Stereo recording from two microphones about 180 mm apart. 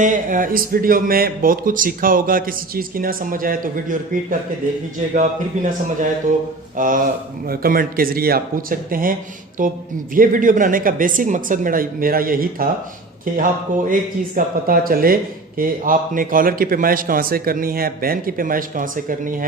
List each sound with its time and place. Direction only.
0.0 s speech: 45° right (ahead or behind)
5.5 s speech: 45° right (ahead or behind)
6.7 s speech: 50° right (ahead or behind)